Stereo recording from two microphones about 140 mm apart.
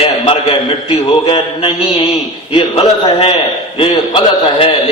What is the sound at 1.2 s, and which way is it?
A man's voice, 40° left (ahead or behind).